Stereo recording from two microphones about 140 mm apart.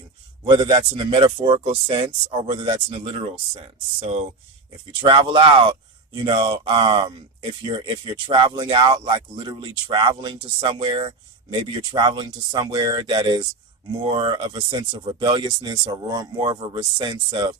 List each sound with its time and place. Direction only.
0.4 s speech: 30° right (ahead or behind)
5.0 s speech: 35° right (ahead or behind)
14.0 s speech: 40° right (ahead or behind)